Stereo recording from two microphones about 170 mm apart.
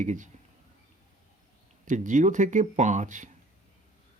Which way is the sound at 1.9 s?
50° right (ahead or behind).